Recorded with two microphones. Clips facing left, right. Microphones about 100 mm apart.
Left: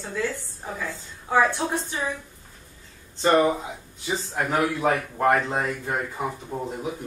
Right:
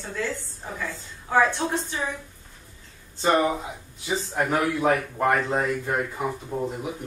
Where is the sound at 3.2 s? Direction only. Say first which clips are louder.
Left 2 dB; 5° right (ahead or behind).